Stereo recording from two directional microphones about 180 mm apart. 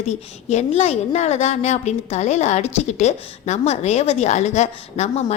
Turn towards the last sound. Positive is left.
turn(degrees=40)  # may be behind; listen again after turning